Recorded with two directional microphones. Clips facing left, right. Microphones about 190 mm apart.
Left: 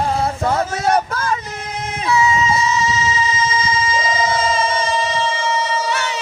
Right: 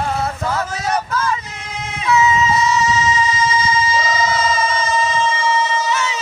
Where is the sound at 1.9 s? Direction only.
35° left (ahead or behind).